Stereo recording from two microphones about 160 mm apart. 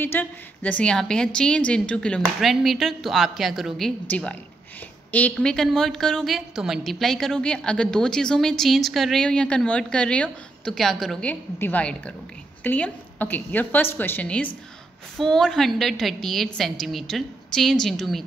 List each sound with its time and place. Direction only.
0.0 s a woman's voice: 15° left (ahead or behind)